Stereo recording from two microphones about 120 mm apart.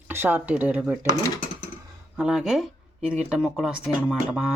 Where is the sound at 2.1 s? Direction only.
5° right (ahead or behind).